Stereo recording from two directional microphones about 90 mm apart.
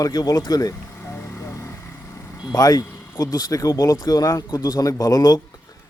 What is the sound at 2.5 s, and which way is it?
A man's voice, 40° left (ahead or behind).